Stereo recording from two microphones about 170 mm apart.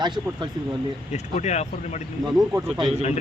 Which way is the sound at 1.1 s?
40° left (ahead or behind).